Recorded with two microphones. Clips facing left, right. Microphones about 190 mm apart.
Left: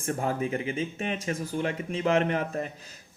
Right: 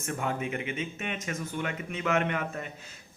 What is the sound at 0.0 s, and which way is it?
Speech, 35° left (ahead or behind).